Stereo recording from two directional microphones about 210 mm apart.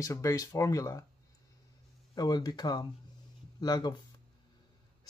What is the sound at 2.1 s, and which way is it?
Speech, 20° left (ahead or behind).